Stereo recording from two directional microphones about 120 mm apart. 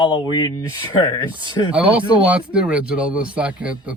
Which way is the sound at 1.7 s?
10° right (ahead or behind).